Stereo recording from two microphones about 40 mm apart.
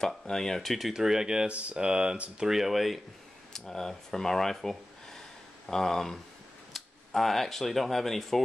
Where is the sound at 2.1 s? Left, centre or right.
Right.